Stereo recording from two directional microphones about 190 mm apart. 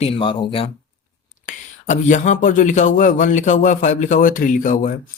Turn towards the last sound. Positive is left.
turn(degrees=45)  # may be behind; listen again after turning